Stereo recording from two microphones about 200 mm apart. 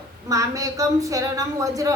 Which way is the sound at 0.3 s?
15° right (ahead or behind).